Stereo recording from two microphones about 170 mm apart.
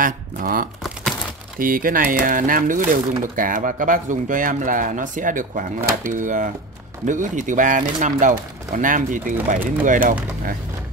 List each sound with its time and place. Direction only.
0.0 s speech: 55° right (ahead or behind)